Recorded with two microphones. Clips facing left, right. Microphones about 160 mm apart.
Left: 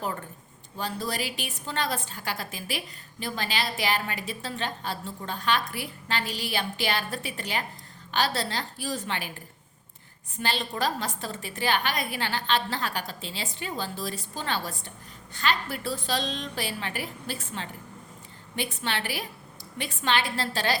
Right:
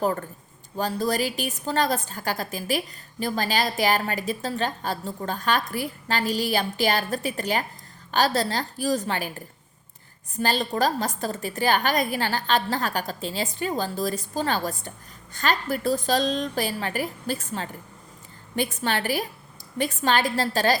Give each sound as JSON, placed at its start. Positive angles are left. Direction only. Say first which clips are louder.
{"t": 0.0, "sound": "a woman's voice", "louder": "right 8 dB", "side_deg": -45}
{"t": 10.3, "sound": "a woman's voice", "louder": "right 6 dB", "side_deg": -40}